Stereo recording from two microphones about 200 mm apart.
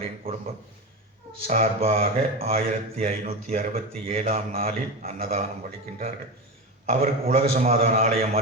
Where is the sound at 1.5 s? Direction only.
35° right (ahead or behind).